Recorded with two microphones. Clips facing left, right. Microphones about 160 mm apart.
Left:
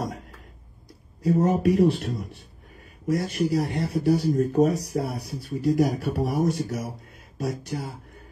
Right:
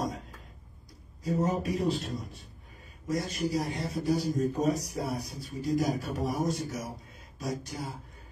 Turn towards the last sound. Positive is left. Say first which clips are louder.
# left 5 dB
turn(degrees=65)  # may be behind; listen again after turning